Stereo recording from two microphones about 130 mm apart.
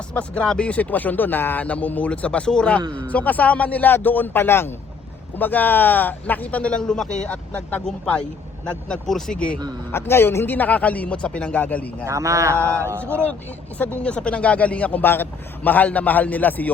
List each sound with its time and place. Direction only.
0.1 s speech: 10° left (ahead or behind)
9.9 s speech: 20° left (ahead or behind)
12.0 s speech: 25° right (ahead or behind)
12.5 s speech: 15° left (ahead or behind)